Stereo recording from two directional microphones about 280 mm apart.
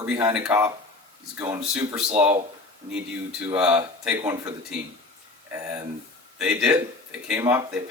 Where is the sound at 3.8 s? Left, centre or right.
Centre.